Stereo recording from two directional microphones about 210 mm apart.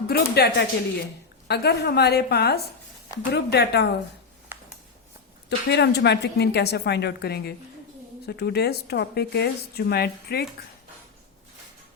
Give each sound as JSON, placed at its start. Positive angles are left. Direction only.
{"t": 0.1, "sound": "speech", "side_deg": 50}
{"t": 5.5, "sound": "speech", "side_deg": 55}